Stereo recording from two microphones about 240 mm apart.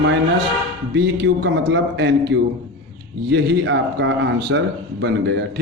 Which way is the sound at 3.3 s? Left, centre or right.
Right.